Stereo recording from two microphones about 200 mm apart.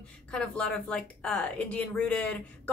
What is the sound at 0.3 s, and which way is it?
A woman's voice, 5° left (ahead or behind).